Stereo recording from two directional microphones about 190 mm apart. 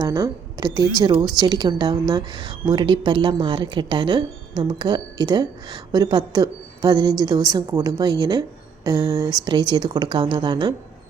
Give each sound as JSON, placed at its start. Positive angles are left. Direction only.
{"t": 0.0, "sound": "a woman's voice", "side_deg": -20}